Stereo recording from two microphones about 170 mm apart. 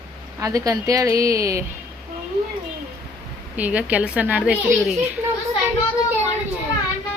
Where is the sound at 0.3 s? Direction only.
20° right (ahead or behind).